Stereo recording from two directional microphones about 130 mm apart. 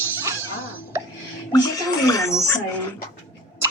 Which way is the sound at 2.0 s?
25° left (ahead or behind).